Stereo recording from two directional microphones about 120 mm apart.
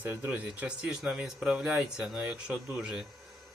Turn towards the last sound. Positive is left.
turn(degrees=-5)  # may be behind; listen again after turning